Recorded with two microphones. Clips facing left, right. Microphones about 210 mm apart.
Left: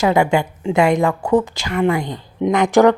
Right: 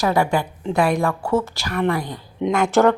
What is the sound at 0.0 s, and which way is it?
A woman's voice, 20° left (ahead or behind).